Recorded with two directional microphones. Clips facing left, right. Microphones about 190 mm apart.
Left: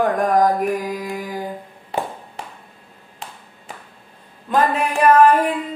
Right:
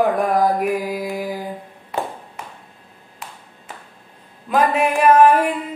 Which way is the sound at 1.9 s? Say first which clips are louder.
Even; 30° left (ahead or behind).